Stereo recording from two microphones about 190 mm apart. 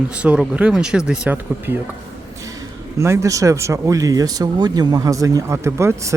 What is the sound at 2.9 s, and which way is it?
Speech, 15° right (ahead or behind).